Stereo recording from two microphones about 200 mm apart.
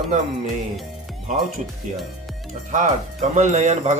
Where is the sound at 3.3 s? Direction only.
35° right (ahead or behind).